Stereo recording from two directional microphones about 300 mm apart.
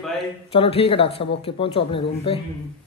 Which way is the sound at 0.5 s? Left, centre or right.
Centre.